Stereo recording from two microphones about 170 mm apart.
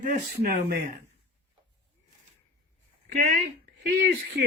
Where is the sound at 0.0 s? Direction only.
55° right (ahead or behind).